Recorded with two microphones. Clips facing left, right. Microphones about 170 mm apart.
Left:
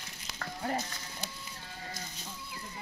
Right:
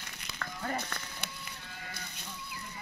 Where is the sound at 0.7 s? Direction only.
60° right (ahead or behind).